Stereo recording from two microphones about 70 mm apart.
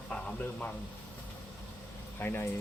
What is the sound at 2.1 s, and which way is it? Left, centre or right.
Speech, left.